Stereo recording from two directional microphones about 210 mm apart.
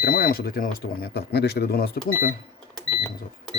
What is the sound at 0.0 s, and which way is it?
Speech, 45° left (ahead or behind).